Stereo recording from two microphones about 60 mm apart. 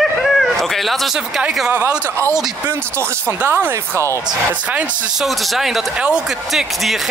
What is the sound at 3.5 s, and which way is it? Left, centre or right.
Speech, right.